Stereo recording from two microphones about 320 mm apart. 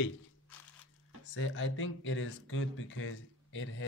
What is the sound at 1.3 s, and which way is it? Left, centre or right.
Speech, left.